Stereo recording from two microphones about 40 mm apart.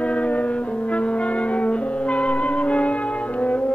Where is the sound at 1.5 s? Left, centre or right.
Left.